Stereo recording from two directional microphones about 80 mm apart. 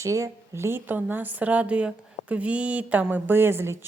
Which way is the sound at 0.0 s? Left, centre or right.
Right.